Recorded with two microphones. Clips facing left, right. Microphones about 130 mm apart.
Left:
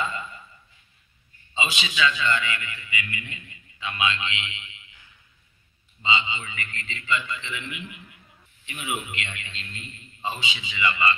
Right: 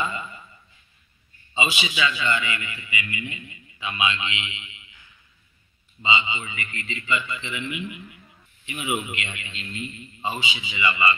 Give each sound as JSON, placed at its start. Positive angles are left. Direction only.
{"t": 1.5, "sound": "a man's voice", "side_deg": -10}
{"t": 6.0, "sound": "a man's voice", "side_deg": -10}